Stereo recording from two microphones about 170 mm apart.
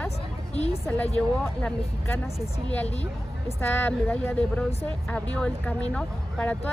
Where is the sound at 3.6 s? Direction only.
10° left (ahead or behind).